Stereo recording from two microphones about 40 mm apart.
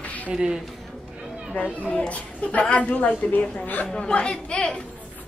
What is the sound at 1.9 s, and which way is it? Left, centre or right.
A woman's voice, left.